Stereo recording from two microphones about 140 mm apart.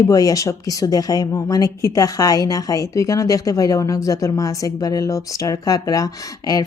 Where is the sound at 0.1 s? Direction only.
25° left (ahead or behind).